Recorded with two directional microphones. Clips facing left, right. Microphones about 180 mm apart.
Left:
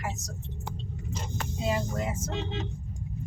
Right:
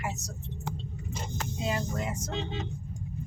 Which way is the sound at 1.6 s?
Centre (ahead or behind).